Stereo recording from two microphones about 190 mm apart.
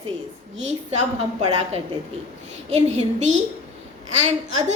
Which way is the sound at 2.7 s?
35° right (ahead or behind).